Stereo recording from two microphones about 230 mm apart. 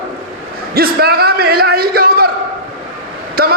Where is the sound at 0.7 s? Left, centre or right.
Right.